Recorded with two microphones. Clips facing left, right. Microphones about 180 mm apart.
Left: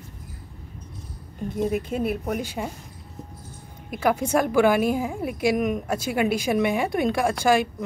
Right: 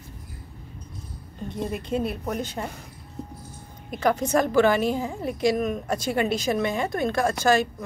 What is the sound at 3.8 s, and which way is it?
A woman's voice, 5° left (ahead or behind).